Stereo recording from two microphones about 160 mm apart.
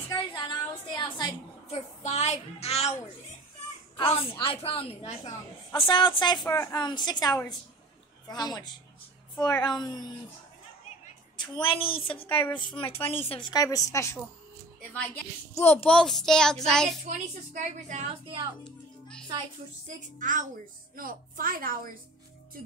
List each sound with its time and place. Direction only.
0.1 s a sound: 25° left (ahead or behind)
1.7 s a woman's voice: 45° left (ahead or behind)
4.0 s a woman's voice: 35° left (ahead or behind)
11.3 s a woman's voice: 30° left (ahead or behind)
13.5 s a woman's voice: 25° left (ahead or behind)
15.6 s a child's voice: 10° left (ahead or behind)
17.1 s a woman's voice: 50° right (ahead or behind)
18.2 s a woman's voice: 30° right (ahead or behind)
18.6 s music: 5° left (ahead or behind)
20.2 s a woman's voice: 55° right (ahead or behind)